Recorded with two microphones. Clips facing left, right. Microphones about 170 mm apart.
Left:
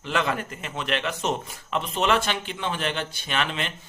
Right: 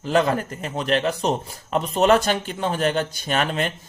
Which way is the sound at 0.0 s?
40° right (ahead or behind).